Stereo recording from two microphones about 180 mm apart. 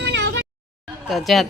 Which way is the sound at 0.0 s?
80° right.